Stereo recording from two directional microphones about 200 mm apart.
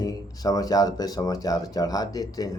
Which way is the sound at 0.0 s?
20° left (ahead or behind).